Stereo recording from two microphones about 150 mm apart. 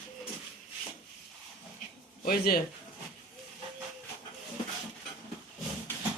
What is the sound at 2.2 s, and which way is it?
Speech, 80° left.